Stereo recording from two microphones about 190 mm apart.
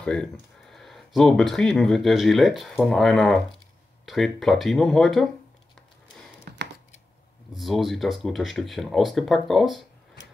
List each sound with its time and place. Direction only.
0.0 s speech: 5° left (ahead or behind)
7.5 s speech: centre (ahead or behind)